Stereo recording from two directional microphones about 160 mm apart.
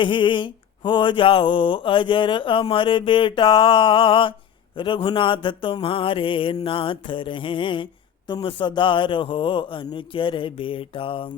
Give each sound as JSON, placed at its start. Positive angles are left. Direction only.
{"t": 0.0, "sound": "mantra", "side_deg": 30}